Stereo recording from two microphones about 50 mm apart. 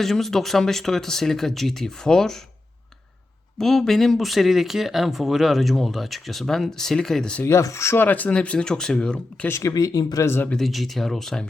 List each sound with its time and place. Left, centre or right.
0.0 s speech: centre
3.6 s speech: centre
7.4 s speech: left
7.9 s speech: left
8.4 s speech: centre
9.0 s speech: left
9.5 s speech: left
10.6 s speech: centre